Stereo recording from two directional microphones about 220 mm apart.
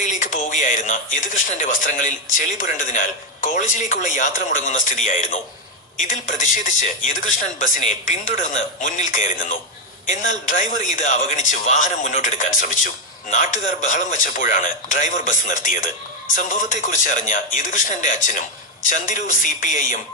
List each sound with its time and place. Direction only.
0.0 s speech: 35° left (ahead or behind)